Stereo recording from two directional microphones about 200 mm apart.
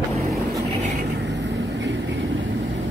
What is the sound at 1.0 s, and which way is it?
Vehicle, 60° right (ahead or behind).